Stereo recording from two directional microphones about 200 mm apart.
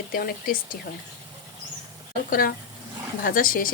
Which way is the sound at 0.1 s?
45° left (ahead or behind).